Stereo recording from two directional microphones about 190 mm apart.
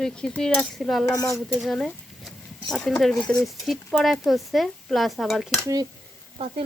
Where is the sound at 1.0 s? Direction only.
20° left (ahead or behind).